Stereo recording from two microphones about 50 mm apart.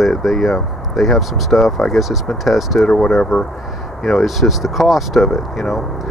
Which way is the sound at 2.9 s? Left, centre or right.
Centre.